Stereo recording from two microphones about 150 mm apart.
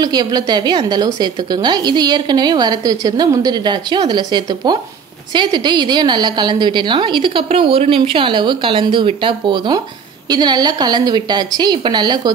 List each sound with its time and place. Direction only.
0.0 s a woman's voice: 25° right (ahead or behind)